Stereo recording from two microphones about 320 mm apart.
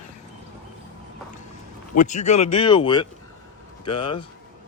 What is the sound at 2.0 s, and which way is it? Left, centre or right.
Speech, left.